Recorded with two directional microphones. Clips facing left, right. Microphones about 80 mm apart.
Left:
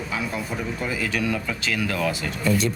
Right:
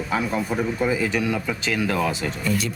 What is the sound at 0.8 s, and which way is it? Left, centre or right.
Speech, centre.